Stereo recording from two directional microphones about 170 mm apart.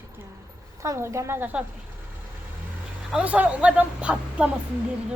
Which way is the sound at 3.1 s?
5° right (ahead or behind).